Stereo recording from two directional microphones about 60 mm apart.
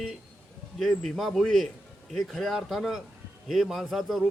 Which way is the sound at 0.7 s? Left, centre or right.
Centre.